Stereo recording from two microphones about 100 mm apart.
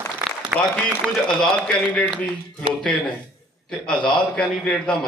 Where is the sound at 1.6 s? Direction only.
15° left (ahead or behind).